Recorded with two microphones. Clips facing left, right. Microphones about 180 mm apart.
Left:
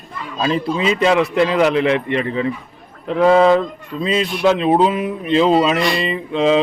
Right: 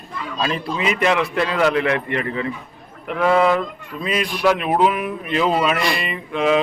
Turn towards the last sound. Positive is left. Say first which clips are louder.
# left 3 dB
turn(degrees=25)  # may be behind; listen again after turning